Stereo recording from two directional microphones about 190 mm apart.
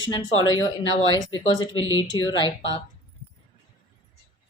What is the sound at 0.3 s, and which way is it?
Speech, 90° left.